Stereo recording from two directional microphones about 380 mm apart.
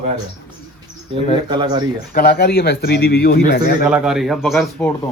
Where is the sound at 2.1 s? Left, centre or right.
Left.